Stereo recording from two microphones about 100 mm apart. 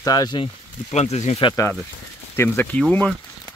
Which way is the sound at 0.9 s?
90° left.